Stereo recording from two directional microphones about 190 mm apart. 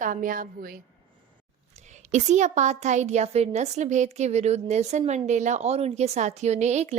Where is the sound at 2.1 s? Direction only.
40° right (ahead or behind).